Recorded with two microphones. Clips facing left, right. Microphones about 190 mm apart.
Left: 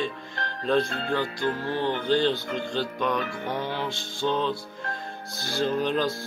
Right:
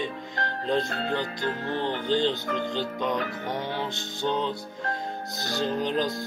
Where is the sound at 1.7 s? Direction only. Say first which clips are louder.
Left 1 dB; 20° right (ahead or behind).